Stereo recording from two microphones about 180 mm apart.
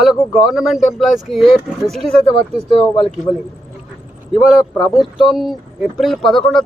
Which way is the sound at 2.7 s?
25° left (ahead or behind).